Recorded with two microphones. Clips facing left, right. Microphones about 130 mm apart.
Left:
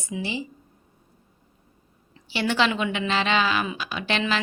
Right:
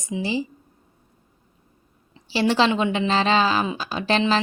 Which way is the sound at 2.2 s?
35° right (ahead or behind).